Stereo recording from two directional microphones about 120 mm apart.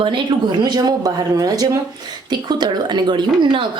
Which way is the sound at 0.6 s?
35° right (ahead or behind).